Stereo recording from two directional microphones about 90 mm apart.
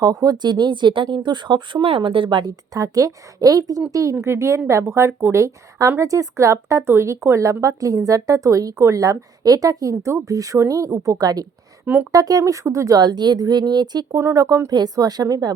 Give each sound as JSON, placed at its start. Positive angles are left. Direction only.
{"t": 0.0, "sound": "speech", "side_deg": -45}
{"t": 2.5, "sound": "speech", "side_deg": -40}
{"t": 13.0, "sound": "speech", "side_deg": -50}
{"t": 14.2, "sound": "speech", "side_deg": -35}